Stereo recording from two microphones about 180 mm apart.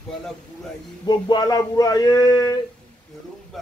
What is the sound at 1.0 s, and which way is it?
Speech, 25° left (ahead or behind).